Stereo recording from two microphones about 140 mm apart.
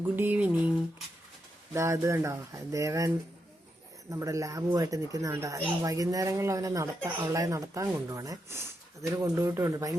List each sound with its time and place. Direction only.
0.0 s speech: 15° right (ahead or behind)
1.7 s speech: 20° right (ahead or behind)
4.1 s speech: 20° right (ahead or behind)